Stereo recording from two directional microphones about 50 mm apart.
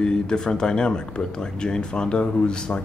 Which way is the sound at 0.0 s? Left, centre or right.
Centre.